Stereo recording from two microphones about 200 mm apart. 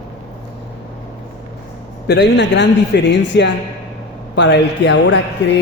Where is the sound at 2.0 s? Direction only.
60° left (ahead or behind).